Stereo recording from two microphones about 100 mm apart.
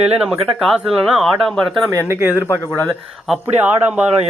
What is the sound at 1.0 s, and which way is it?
Speech, centre (ahead or behind).